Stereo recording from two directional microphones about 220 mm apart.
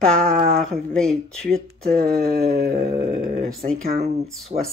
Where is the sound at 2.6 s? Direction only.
40° right (ahead or behind).